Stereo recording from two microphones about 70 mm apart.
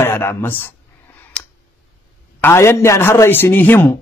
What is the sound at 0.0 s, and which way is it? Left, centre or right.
Speech, left.